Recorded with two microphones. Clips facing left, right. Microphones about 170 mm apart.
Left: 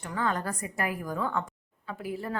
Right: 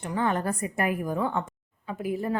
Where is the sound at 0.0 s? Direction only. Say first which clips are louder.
Right 4 dB; 20° right (ahead or behind).